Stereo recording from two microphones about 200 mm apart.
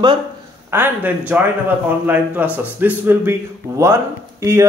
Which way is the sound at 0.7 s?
10° right (ahead or behind).